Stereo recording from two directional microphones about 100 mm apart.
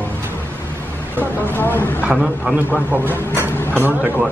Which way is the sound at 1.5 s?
20° left (ahead or behind).